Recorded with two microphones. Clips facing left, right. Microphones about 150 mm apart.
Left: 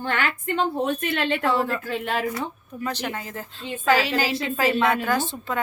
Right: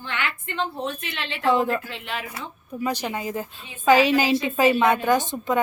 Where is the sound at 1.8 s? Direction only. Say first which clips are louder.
Left 7 dB; 45° left (ahead or behind).